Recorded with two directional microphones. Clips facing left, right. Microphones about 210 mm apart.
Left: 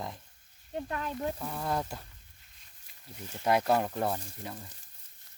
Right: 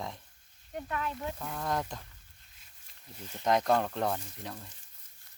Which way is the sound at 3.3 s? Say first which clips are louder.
Even; 5° left (ahead or behind).